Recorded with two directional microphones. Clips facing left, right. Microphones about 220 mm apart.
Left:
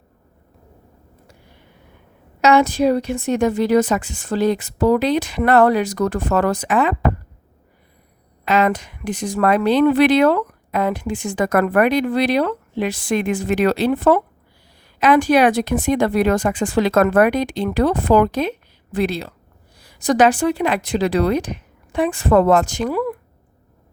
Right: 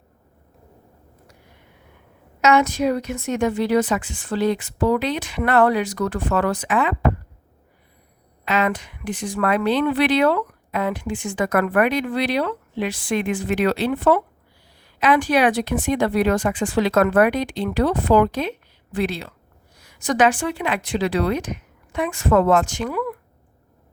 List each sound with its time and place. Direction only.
1.3 s a sound: 30° left (ahead or behind)
2.4 s speech: 35° left (ahead or behind)
8.4 s speech: 40° left (ahead or behind)